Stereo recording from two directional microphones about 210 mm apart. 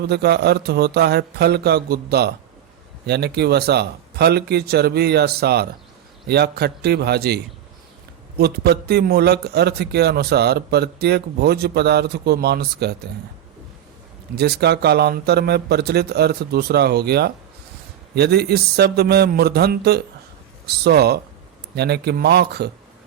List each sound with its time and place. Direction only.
0.1 s a man's voice: 50° right (ahead or behind)
14.3 s a man's voice: 50° right (ahead or behind)